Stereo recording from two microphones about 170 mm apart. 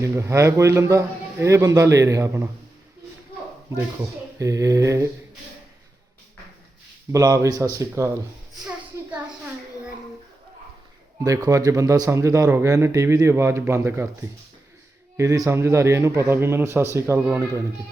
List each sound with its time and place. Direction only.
0.0 s speech: 15° right (ahead or behind)
4.4 s speech: 20° right (ahead or behind)
7.1 s speech: 20° right (ahead or behind)
8.6 s child singing: 5° right (ahead or behind)
11.2 s speech: 20° right (ahead or behind)